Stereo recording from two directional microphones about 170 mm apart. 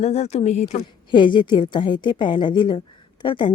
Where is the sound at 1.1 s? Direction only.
30° left (ahead or behind).